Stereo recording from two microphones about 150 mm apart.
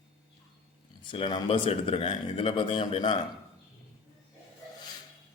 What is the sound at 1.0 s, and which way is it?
Speech, 30° left (ahead or behind).